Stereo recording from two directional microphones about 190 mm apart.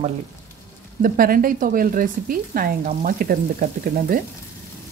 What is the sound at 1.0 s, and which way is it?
Speech, 50° right (ahead or behind).